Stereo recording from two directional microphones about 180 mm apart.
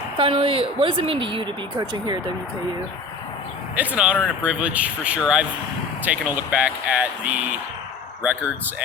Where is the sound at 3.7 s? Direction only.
10° right (ahead or behind).